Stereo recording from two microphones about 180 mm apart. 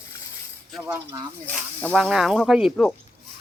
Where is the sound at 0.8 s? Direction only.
15° right (ahead or behind).